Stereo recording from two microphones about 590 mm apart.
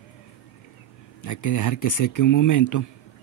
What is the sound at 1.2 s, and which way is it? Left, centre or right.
Speech, left.